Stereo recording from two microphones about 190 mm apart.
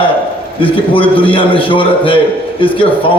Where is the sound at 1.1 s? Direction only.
25° left (ahead or behind).